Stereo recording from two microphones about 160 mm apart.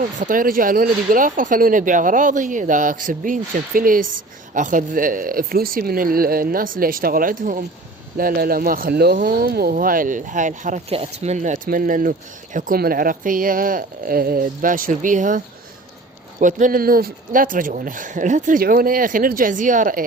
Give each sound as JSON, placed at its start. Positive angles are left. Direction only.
{"t": 0.2, "sound": "speech", "side_deg": -60}
{"t": 16.4, "sound": "speech", "side_deg": -55}